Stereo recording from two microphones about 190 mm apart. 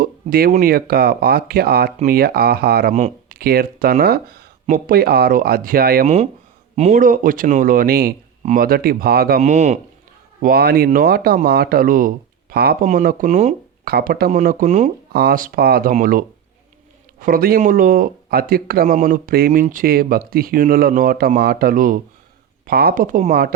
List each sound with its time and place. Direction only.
0.0 s speech: 50° right (ahead or behind)
2.9 s speech: 40° right (ahead or behind)
6.7 s speech: 35° right (ahead or behind); by 9.4 s 55° right (ahead or behind)
9.4 s speech: 35° right (ahead or behind)
10.4 s speech: 55° right (ahead or behind)
12.8 s speech: 40° right (ahead or behind)
13.8 s speech: 50° right (ahead or behind)
15.1 s speech: 55° right (ahead or behind)